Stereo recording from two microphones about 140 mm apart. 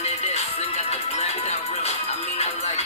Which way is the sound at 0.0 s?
50° left (ahead or behind).